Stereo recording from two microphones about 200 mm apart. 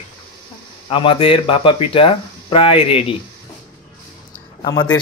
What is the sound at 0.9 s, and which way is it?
Speech, 25° left (ahead or behind).